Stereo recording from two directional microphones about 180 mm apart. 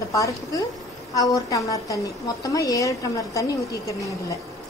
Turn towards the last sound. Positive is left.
turn(degrees=15)  # may be behind; listen again after turning